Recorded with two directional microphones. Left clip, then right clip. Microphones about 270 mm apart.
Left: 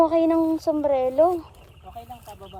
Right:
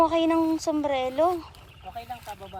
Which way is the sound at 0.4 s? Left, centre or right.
Right.